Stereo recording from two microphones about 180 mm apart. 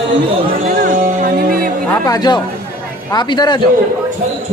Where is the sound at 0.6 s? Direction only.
50° right (ahead or behind).